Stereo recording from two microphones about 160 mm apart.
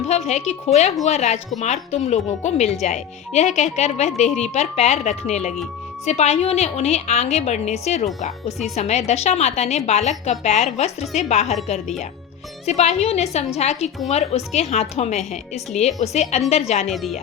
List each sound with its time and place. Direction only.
0.3 s a woman's voice: 45° left (ahead or behind)
12.6 s a woman's voice: 45° left (ahead or behind)
16.9 s speech: centre (ahead or behind)